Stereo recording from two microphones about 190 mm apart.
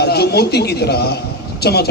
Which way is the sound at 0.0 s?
55° left (ahead or behind).